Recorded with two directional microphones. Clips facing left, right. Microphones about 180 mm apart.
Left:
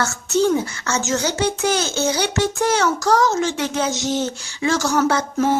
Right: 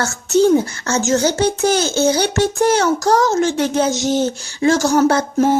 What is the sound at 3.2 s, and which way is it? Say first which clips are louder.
Speech: right 4 dB; 50° right (ahead or behind).